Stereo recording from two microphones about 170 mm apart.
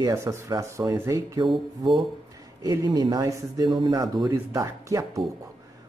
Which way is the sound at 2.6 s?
25° right (ahead or behind).